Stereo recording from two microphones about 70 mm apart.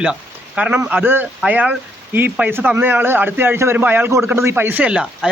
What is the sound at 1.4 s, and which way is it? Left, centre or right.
A man's voice, centre.